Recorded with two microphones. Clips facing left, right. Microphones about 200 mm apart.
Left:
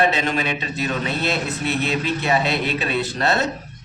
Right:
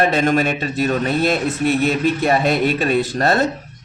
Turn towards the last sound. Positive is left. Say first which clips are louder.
# right 4 dB
turn(degrees=-45)  # may be behind; listen again after turning